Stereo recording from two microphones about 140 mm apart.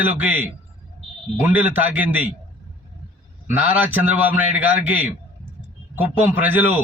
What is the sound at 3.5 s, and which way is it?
A man's voice, 10° right (ahead or behind).